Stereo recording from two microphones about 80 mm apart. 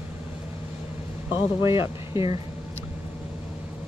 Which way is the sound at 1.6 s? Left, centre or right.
Right.